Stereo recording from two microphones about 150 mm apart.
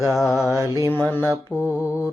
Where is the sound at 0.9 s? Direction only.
10° left (ahead or behind).